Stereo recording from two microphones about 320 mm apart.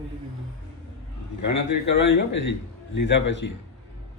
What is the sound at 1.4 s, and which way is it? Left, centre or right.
Speech, left.